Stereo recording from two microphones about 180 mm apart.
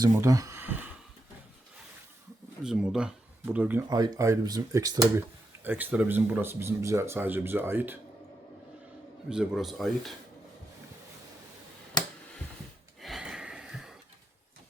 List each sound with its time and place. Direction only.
0.0 s a sound: 20° right (ahead or behind)
2.6 s speech: 5° right (ahead or behind)
3.8 s speech: 20° right (ahead or behind)
5.6 s speech: 10° right (ahead or behind)
9.3 s speech: centre (ahead or behind)
13.0 s a sound: centre (ahead or behind)